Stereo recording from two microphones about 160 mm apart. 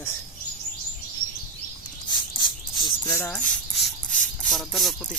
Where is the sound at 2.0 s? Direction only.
25° left (ahead or behind).